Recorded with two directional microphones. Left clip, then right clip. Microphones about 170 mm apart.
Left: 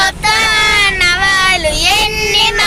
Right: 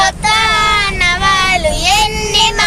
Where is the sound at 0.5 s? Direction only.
5° right (ahead or behind).